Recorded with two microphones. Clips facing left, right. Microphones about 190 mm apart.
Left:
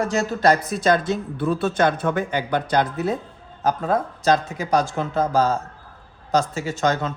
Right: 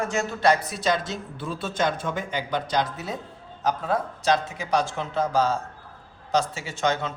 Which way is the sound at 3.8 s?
45° left (ahead or behind).